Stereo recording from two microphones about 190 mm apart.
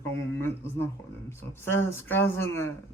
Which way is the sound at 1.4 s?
10° left (ahead or behind).